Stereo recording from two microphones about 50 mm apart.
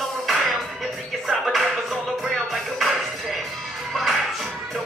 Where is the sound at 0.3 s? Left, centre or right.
Centre.